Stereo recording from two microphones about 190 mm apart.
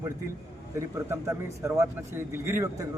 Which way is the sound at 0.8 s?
15° right (ahead or behind).